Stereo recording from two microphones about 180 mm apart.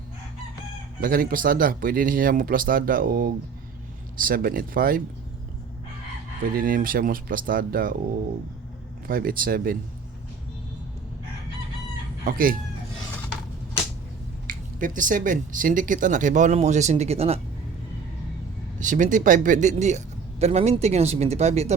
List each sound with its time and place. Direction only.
1.0 s speech: 50° right (ahead or behind)
6.6 s speech: 50° right (ahead or behind)
9.0 s speech: 55° right (ahead or behind)
12.2 s speech: 50° right (ahead or behind)
14.4 s speech: 50° right (ahead or behind)
18.8 s speech: 45° right (ahead or behind)